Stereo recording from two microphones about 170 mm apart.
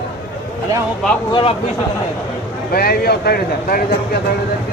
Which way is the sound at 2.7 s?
65° left (ahead or behind).